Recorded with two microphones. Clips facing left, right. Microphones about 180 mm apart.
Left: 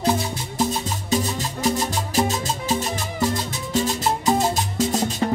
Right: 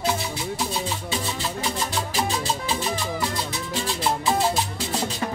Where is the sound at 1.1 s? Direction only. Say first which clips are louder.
Left 9 dB; 45° left (ahead or behind).